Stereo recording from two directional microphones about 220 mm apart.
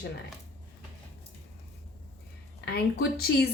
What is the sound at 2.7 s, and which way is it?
Speech, 45° left (ahead or behind).